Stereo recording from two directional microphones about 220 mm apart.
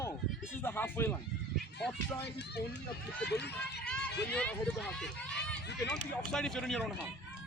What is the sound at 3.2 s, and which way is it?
Speech, 50° left (ahead or behind).